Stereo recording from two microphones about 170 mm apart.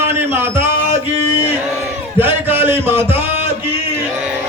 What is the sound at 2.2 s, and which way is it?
Speech, 10° right (ahead or behind).